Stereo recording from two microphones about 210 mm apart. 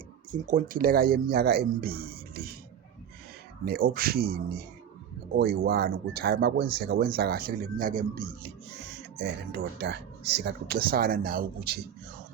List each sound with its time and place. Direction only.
0.3 s speech: 40° right (ahead or behind)
3.7 s speech: 45° right (ahead or behind)